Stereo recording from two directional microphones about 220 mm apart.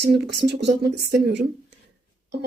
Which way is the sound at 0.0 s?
50° right (ahead or behind).